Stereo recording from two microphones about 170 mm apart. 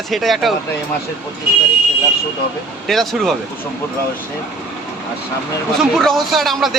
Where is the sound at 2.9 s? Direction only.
Centre (ahead or behind).